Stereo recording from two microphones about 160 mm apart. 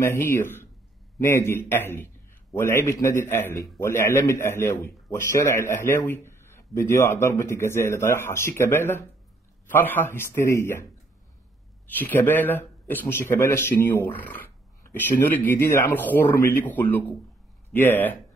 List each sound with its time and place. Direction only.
0.0 s a man's voice: 15° left (ahead or behind)
11.9 s a man's voice: 10° left (ahead or behind)